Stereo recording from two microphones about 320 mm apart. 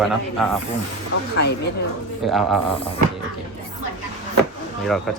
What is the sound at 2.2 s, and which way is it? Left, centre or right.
Speech, centre.